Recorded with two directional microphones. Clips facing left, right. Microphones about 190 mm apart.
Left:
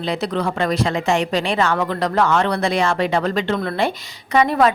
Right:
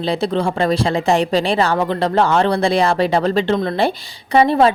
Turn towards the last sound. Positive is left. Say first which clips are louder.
# right 3 dB
turn(degrees=-30)  # may be behind; listen again after turning